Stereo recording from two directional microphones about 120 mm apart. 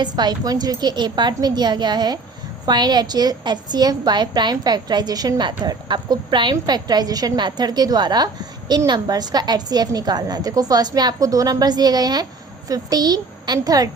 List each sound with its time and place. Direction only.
0.0 s a woman's voice: 35° right (ahead or behind)